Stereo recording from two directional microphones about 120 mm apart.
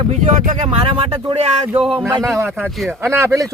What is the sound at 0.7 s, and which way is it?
Speech, 50° right (ahead or behind).